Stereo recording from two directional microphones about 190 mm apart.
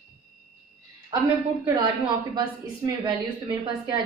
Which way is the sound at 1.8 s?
25° right (ahead or behind).